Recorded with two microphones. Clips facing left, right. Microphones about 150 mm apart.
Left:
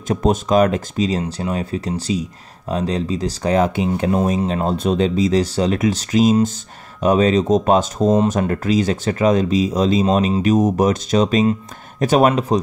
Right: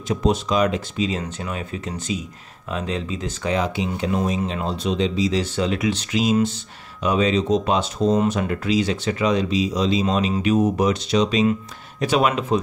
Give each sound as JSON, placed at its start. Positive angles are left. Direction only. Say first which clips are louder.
{"t": 0.1, "sound": "speech", "louder": "left 4 dB", "side_deg": 50}